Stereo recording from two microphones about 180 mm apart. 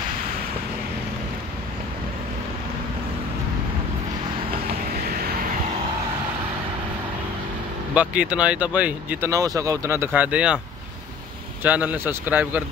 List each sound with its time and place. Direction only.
7.9 s speech: 5° right (ahead or behind)
11.6 s speech: 10° right (ahead or behind)